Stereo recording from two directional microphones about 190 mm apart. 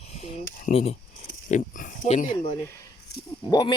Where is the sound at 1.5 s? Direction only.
45° left (ahead or behind).